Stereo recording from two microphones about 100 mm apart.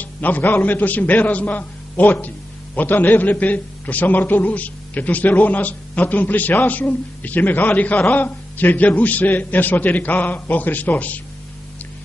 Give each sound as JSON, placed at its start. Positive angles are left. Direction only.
{"t": 0.0, "sound": "a man's voice", "side_deg": 15}